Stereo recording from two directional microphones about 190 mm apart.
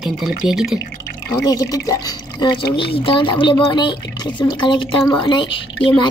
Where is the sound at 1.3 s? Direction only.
20° left (ahead or behind).